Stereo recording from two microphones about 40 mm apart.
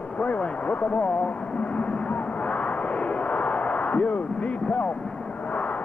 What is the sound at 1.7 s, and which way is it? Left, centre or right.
Vehicle, left.